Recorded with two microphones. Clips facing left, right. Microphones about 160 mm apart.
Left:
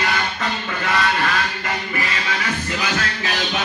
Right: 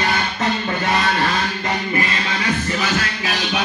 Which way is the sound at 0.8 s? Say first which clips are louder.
Even; 30° right (ahead or behind).